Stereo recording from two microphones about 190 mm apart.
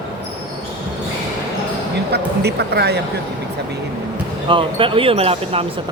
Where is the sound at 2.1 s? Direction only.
60° right (ahead or behind).